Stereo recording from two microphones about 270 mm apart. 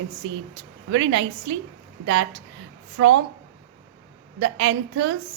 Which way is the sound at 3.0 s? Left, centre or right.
Right.